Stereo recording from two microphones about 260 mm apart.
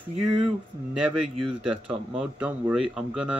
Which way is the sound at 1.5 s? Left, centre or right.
Centre.